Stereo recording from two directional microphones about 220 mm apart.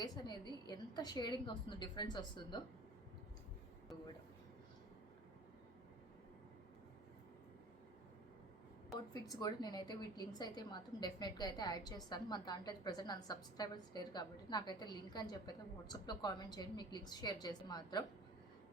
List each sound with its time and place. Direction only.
0.0 s a woman's voice: 20° left (ahead or behind)
9.3 s a woman's voice: 15° left (ahead or behind)